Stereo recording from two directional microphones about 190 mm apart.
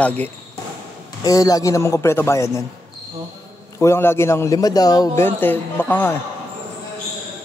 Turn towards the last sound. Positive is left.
turn(degrees=10)  # may be behind; listen again after turning